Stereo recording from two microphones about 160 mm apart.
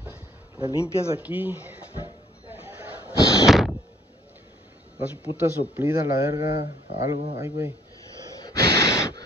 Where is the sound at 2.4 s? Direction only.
10° right (ahead or behind).